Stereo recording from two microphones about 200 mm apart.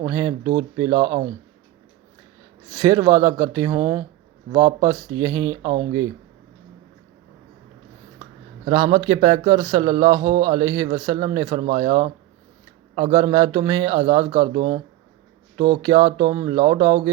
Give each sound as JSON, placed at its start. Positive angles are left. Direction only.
{"t": 0.0, "sound": "speech", "side_deg": -20}
{"t": 2.7, "sound": "speech", "side_deg": -20}
{"t": 8.7, "sound": "speech", "side_deg": -25}